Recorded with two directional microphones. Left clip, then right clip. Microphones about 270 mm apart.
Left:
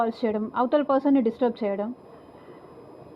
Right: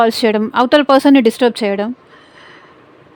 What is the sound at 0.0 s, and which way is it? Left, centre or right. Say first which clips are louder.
Speech: right 13 dB; right.